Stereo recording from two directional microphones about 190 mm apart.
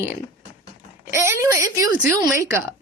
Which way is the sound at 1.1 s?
15° right (ahead or behind).